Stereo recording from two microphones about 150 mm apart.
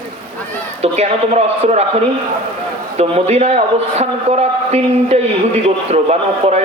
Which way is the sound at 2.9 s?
45° right (ahead or behind).